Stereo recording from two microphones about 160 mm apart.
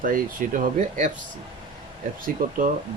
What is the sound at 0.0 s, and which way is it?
Speech, 60° right (ahead or behind).